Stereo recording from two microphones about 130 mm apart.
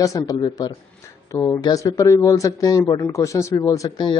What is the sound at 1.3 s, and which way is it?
A man's voice, 25° left (ahead or behind).